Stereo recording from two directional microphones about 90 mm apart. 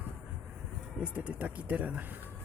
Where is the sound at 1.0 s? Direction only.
10° right (ahead or behind).